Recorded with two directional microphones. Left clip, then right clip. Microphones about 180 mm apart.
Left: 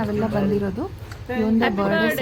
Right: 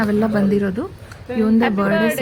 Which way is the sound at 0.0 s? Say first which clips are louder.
Right 4 dB; 15° right (ahead or behind).